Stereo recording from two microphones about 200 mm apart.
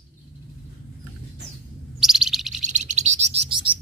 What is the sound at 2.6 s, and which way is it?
Bird, 35° right (ahead or behind).